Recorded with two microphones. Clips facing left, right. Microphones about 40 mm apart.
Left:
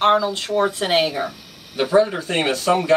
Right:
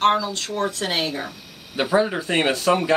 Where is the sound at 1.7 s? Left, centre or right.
Centre.